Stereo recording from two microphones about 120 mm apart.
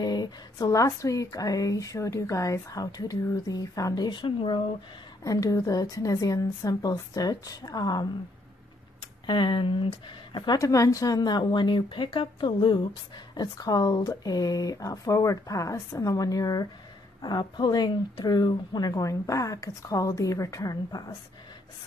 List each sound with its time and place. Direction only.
0.0 s speech: 35° left (ahead or behind)
5.2 s speech: 30° left (ahead or behind)
9.2 s speech: 40° left (ahead or behind)